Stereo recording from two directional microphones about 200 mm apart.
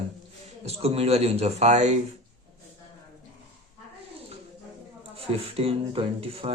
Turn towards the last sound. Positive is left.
turn(degrees=-30)  # may be behind; listen again after turning